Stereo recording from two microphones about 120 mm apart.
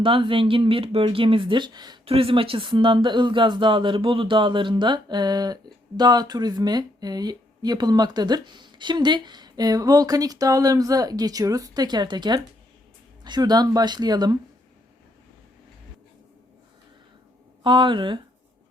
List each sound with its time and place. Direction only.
0.0 s speech: 45° right (ahead or behind)
2.0 s speech: 50° right (ahead or behind)
17.6 s speech: 45° right (ahead or behind)